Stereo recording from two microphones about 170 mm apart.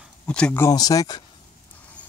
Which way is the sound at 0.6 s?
20° left (ahead or behind).